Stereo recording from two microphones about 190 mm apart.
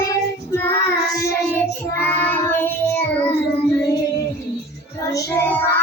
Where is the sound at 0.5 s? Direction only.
15° left (ahead or behind).